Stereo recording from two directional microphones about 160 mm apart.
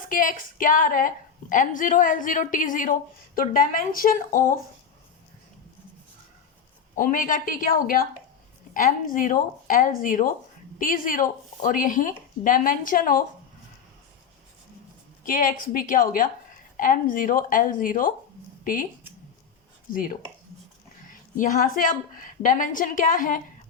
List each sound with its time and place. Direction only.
0.1 s a woman's voice: 60° left (ahead or behind)
6.9 s a woman's voice: 60° left (ahead or behind)
15.2 s a woman's voice: 60° left (ahead or behind)
19.9 s a woman's voice: 60° left (ahead or behind)